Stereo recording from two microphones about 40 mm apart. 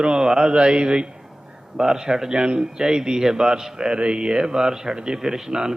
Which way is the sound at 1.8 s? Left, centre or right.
Centre.